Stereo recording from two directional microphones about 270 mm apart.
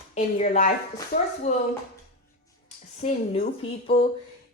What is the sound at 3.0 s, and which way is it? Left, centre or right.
Speech, left.